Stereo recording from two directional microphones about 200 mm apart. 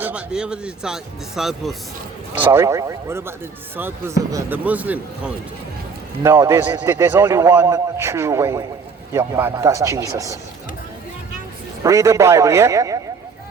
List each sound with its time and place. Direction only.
0.0 s speech: 5° right (ahead or behind)
2.4 s a man's voice: 10° right (ahead or behind)
11.8 s a man's voice: 15° right (ahead or behind)